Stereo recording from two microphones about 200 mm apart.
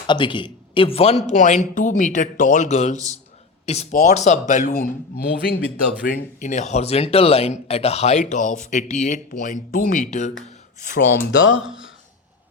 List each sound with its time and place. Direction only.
0.1 s speech: 25° left (ahead or behind); by 11.0 s 40° left (ahead or behind)
11.6 s speech: 5° right (ahead or behind)